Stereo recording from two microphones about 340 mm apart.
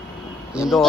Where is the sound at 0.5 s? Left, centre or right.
Centre.